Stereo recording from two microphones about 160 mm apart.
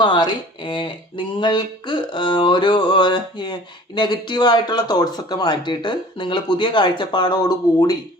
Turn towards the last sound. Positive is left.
turn(degrees=25)  # may be behind; listen again after turning